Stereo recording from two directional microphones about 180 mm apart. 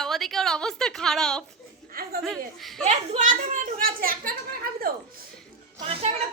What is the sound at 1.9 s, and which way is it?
Chuckle, 55° right (ahead or behind).